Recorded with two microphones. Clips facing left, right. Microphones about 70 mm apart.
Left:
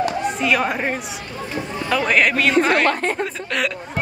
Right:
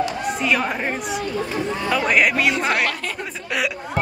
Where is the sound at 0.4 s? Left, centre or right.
Centre.